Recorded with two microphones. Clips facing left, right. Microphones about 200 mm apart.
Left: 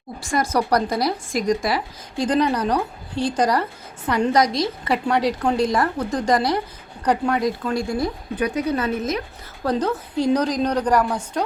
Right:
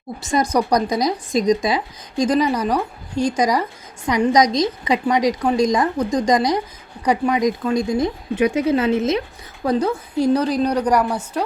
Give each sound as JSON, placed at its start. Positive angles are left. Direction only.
{"t": 0.2, "sound": "speech", "side_deg": -20}
{"t": 9.6, "sound": "speech", "side_deg": -10}